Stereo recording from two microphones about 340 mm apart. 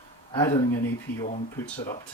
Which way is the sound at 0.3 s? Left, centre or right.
Centre.